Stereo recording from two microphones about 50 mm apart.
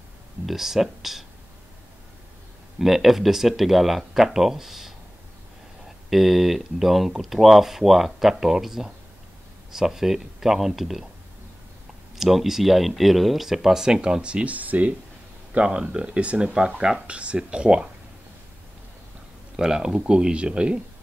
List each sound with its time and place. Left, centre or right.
0.5 s speech: centre
2.8 s speech: centre
12.2 s speech: centre
14.2 s speech: right
15.6 s speech: centre
19.5 s speech: centre